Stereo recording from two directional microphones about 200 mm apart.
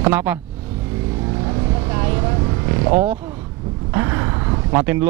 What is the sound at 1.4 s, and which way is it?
Vehicle, 20° right (ahead or behind).